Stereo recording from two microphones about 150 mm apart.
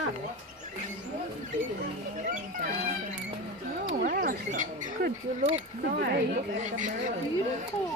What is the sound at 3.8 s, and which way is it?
Speech, 80° right.